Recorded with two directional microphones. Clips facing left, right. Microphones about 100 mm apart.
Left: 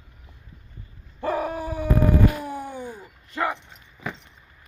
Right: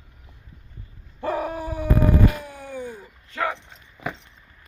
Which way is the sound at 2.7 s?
10° left (ahead or behind).